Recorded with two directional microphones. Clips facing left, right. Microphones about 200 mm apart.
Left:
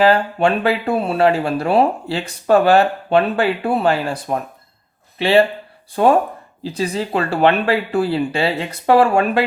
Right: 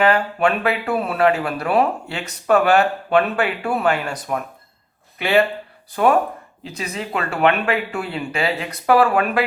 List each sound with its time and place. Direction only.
0.0 s speech: 30° left (ahead or behind)
6.6 s speech: 30° left (ahead or behind)